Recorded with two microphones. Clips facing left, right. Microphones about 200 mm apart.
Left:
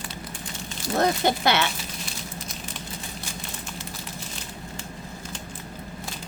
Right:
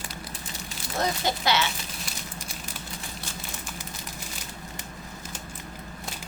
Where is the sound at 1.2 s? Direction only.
55° left (ahead or behind).